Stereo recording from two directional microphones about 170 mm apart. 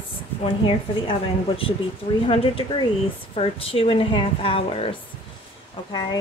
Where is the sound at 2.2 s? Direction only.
35° left (ahead or behind).